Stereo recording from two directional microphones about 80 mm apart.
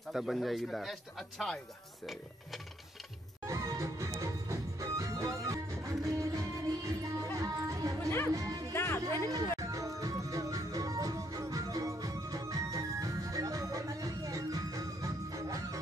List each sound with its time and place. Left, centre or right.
0.1 s speech: centre
3.4 s music: right
8.7 s music: left
9.0 s music: right